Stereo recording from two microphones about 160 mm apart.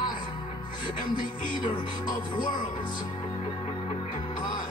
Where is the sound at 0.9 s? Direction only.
55° left (ahead or behind).